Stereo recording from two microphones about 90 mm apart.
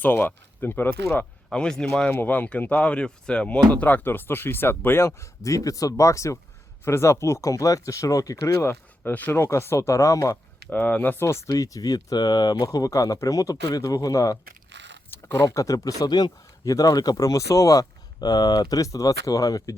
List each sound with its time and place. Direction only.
0.0 s speech: 25° left (ahead or behind)
1.2 s speech: 5° left (ahead or behind); by 8.5 s 40° left (ahead or behind)
9.0 s speech: 20° left (ahead or behind); by 10.3 s 35° left (ahead or behind)
10.7 s speech: 15° left (ahead or behind); by 19.7 s 40° left (ahead or behind)